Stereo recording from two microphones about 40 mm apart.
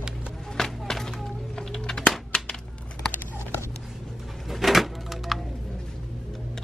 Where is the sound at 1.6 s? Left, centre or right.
Centre.